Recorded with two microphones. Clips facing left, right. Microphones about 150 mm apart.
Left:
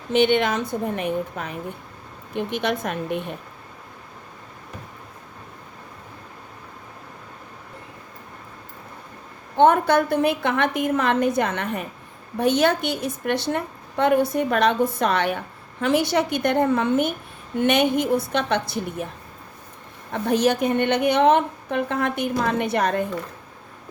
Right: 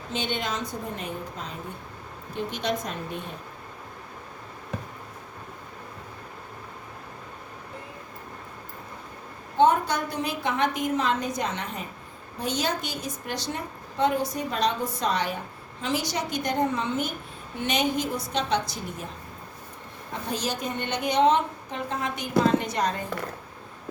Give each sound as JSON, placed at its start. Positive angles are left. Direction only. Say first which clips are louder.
{"t": 0.1, "sound": "a woman's voice", "louder": "left 11 dB", "side_deg": 65}
{"t": 9.6, "sound": "a woman's voice", "louder": "left 5 dB", "side_deg": 60}
{"t": 20.3, "sound": "a woman's voice", "louder": "left 11 dB", "side_deg": 60}